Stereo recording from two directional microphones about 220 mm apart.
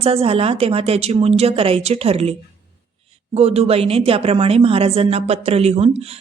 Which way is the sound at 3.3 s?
25° right (ahead or behind).